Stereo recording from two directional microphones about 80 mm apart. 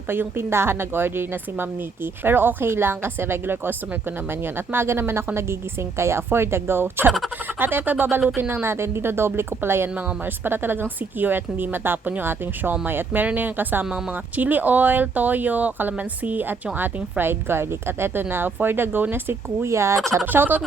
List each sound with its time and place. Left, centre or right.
0.1 s a woman's voice: right
20.3 s speech: right